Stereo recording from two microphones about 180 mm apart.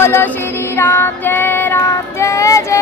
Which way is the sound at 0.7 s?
15° left (ahead or behind).